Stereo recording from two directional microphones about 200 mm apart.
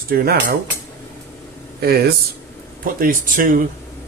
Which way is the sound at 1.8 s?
50° right (ahead or behind).